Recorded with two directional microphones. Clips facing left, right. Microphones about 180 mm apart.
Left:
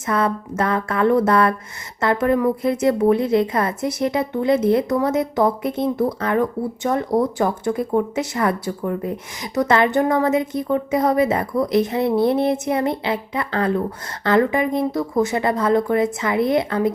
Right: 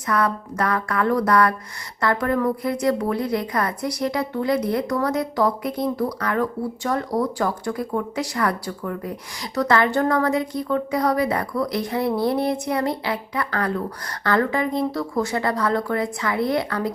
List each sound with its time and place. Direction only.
0.1 s a woman's voice: 25° left (ahead or behind)